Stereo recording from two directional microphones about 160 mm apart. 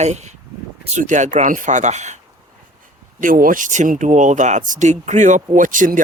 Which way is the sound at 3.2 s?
60° right (ahead or behind).